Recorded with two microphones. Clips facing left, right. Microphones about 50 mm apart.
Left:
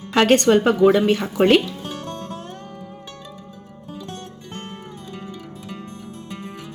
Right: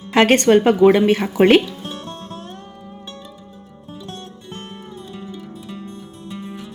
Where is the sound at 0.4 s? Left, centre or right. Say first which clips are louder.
Right 3 dB; centre.